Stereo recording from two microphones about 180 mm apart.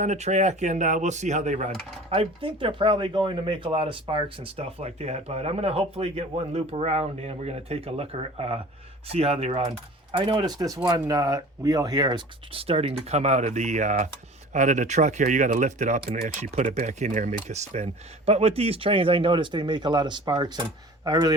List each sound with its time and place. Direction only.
0.0 s speech: 40° right (ahead or behind); by 21.3 s 20° right (ahead or behind)